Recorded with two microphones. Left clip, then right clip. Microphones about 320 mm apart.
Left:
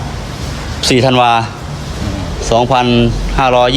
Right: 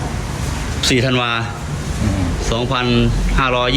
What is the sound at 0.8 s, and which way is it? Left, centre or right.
Speech, centre.